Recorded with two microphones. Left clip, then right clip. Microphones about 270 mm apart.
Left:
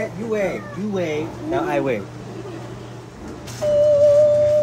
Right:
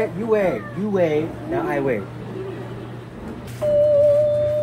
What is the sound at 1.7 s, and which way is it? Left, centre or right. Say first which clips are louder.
Speech: even; centre.